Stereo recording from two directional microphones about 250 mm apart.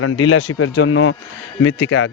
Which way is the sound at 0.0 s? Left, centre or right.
Left.